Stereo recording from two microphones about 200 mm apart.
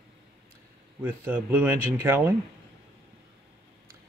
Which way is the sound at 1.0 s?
10° right (ahead or behind).